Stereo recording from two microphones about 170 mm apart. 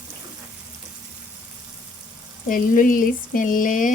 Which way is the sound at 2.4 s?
50° left (ahead or behind).